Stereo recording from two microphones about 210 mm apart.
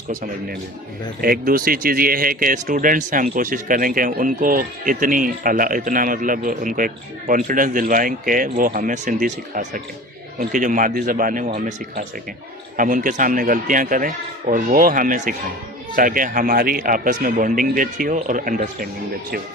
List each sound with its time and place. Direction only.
0.1 s speech: 40° right (ahead or behind)